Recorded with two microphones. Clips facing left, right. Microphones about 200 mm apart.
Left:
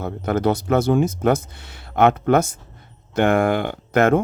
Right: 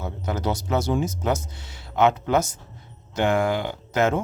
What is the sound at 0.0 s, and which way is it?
Speech, 55° left (ahead or behind).